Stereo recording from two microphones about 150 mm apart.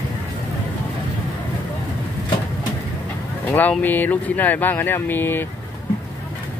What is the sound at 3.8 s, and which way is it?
Speech, 10° left (ahead or behind).